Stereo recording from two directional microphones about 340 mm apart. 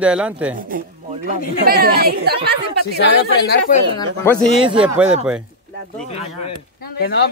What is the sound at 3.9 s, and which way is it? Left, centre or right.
A man's voice, centre.